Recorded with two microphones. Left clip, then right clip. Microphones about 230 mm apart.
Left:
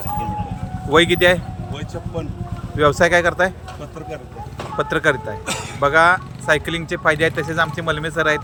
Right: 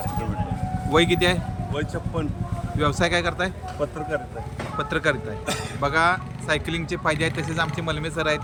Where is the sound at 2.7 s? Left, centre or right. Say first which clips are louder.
Left 8 dB; centre.